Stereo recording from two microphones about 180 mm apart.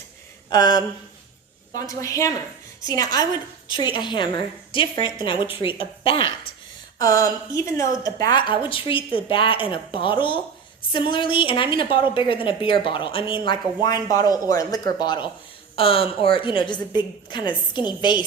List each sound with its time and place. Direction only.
0.5 s speech: 25° left (ahead or behind)